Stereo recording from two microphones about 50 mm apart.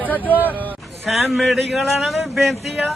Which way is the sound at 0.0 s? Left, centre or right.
Left.